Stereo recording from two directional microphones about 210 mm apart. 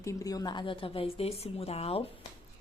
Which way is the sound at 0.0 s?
15° left (ahead or behind).